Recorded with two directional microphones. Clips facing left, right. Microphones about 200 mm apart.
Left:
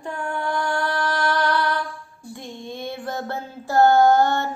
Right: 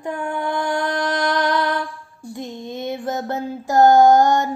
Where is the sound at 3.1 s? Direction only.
20° right (ahead or behind).